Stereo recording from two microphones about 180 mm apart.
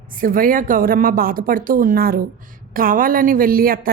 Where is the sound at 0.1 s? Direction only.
50° right (ahead or behind).